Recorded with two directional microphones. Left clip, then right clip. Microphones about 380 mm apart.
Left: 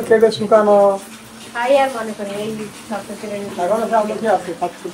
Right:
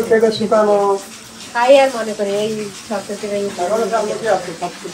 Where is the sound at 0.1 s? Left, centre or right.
Left.